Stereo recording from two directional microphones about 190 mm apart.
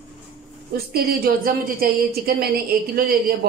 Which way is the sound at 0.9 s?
50° right (ahead or behind).